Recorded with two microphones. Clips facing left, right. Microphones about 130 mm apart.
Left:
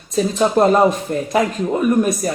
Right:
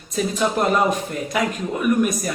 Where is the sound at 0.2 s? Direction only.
30° left (ahead or behind).